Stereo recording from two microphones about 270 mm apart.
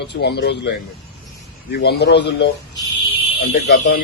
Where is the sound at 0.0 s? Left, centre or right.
Left.